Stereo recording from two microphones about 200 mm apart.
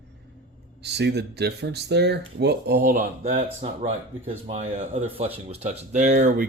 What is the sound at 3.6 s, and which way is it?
A man's voice, 35° right (ahead or behind).